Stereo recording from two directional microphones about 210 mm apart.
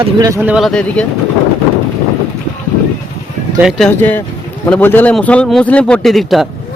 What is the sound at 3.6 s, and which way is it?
A man's voice, centre (ahead or behind).